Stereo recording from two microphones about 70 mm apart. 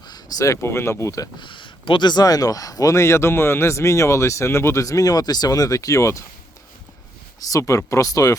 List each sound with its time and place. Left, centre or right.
0.1 s speech: left
2.0 s speech: left
7.3 s speech: left